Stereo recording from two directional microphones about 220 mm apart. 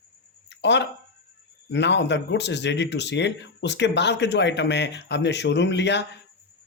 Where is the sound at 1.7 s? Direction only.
50° left (ahead or behind).